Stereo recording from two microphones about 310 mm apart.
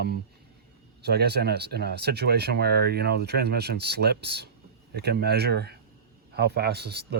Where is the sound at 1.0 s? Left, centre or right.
Right.